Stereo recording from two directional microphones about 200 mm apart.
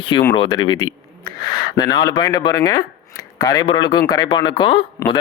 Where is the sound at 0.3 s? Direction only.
25° left (ahead or behind).